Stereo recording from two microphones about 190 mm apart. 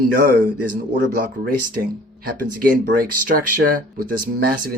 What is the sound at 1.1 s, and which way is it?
Speech, 50° right (ahead or behind).